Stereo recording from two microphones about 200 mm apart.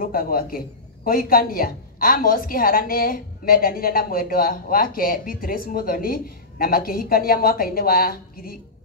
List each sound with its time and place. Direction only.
0.0 s a woman's voice: 45° left (ahead or behind)